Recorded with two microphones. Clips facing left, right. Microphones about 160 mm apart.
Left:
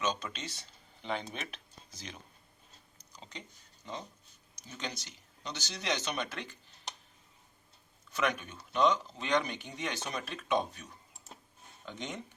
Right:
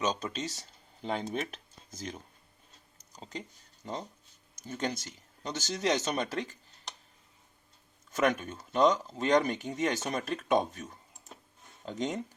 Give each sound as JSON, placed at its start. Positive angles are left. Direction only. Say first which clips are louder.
{"t": 0.0, "sound": "speech", "louder": "right 3 dB", "side_deg": -40}
{"t": 8.1, "sound": "speech", "louder": "right 5 dB", "side_deg": -45}